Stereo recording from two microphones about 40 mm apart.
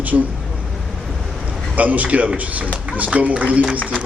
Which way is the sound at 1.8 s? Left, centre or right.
Right.